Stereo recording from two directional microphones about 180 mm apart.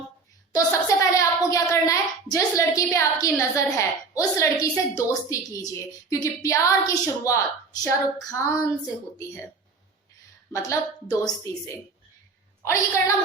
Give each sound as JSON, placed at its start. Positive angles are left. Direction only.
{"t": 0.5, "sound": "a child's voice", "side_deg": 20}
{"t": 10.5, "sound": "a woman's voice", "side_deg": 20}